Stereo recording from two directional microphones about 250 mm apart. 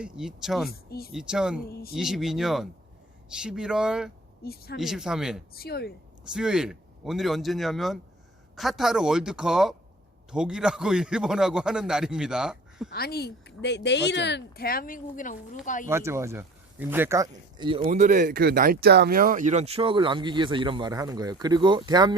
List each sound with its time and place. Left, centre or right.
0.0 s a man's voice: centre
0.9 s speech: left
1.1 s a man's voice: centre
4.4 s speech: left
4.8 s a man's voice: centre
5.5 s speech: left
6.3 s a man's voice: centre
12.9 s speech: left
15.9 s speech: centre
17.8 s speech: right